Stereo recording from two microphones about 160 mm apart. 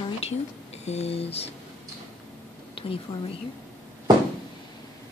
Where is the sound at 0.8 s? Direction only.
40° left (ahead or behind).